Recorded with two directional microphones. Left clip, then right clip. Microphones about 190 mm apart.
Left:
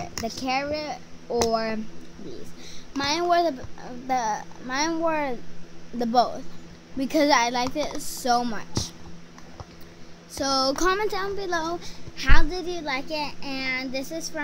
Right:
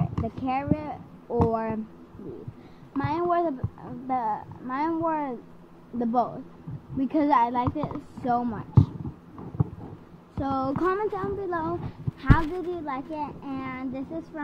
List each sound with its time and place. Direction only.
0.2 s a child's voice: 15° left (ahead or behind)
3.0 s a child's voice: 15° left (ahead or behind)
10.3 s a child's voice: 20° left (ahead or behind)